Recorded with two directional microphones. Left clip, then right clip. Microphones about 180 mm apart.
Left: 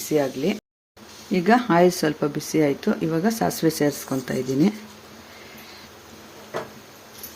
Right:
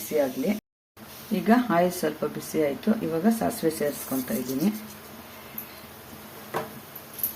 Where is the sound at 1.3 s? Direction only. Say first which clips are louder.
Left 4 dB; 45° left (ahead or behind).